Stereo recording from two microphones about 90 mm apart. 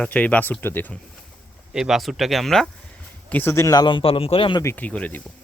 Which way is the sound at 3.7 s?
60° left (ahead or behind).